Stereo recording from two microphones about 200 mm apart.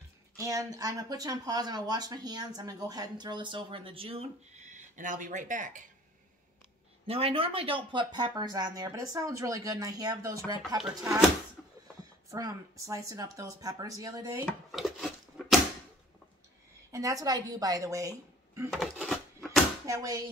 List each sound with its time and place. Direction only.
0.4 s speech: 15° right (ahead or behind); by 5.9 s 40° right (ahead or behind)
7.1 s speech: 30° right (ahead or behind)
12.3 s speech: 15° right (ahead or behind)
14.4 s a sound: centre (ahead or behind)
16.9 s a woman's voice: 15° right (ahead or behind)
18.7 s a sound: centre (ahead or behind)
19.9 s speech: 20° right (ahead or behind)